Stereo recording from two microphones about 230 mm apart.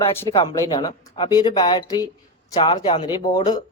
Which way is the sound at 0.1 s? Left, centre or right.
Centre.